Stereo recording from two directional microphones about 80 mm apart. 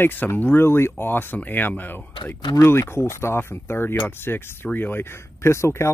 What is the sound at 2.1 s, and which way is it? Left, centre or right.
Speech, left.